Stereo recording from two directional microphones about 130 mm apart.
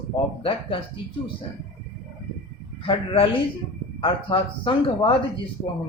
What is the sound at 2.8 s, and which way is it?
Speech, 40° left (ahead or behind).